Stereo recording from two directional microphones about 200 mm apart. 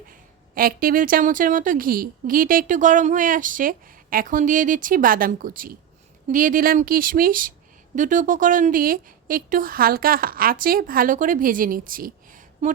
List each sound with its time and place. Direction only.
0.1 s a woman's voice: 45° right (ahead or behind)